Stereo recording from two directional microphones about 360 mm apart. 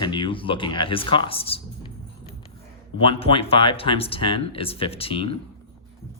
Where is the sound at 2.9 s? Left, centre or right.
Centre.